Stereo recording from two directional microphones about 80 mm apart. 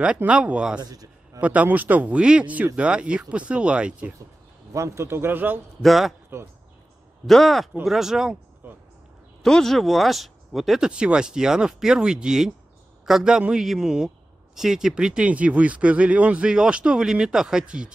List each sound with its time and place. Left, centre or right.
0.0 s a man's voice: centre
0.7 s a sound: right
1.4 s a man's voice: centre
4.7 s speech: right
5.8 s speech: centre
7.2 s speech: centre
9.4 s speech: centre
10.9 s a man's voice: centre